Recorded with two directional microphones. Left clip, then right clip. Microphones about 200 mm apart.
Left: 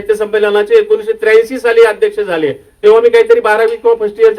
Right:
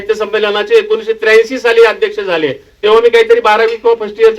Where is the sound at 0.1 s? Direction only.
55° left (ahead or behind).